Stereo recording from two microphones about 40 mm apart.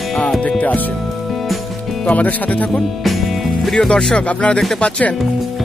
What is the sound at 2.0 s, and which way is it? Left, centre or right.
Speech, left.